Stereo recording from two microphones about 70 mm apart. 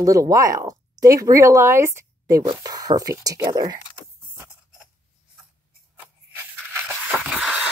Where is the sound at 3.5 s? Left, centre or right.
Right.